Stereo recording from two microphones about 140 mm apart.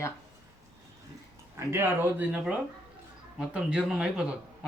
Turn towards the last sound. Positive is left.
turn(degrees=-10)  # may be behind; listen again after turning